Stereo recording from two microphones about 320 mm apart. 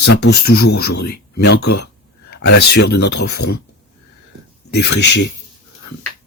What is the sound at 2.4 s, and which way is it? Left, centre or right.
Speech, left.